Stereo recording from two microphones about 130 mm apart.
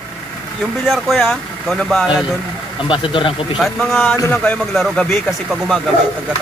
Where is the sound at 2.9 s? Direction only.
40° left (ahead or behind).